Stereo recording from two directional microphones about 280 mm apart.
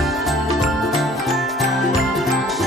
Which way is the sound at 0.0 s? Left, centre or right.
Centre.